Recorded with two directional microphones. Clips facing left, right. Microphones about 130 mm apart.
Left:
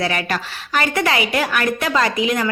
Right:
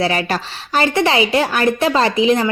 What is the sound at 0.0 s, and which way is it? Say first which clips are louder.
A woman's voice: right 3 dB; 30° right (ahead or behind).